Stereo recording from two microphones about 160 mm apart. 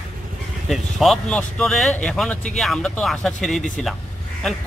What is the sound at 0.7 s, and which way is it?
Speech, centre (ahead or behind).